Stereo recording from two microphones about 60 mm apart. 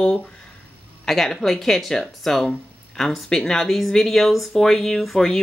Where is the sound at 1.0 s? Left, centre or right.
Centre.